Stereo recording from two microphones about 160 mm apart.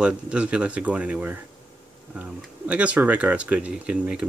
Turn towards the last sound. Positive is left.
turn(degrees=-5)  # may be behind; listen again after turning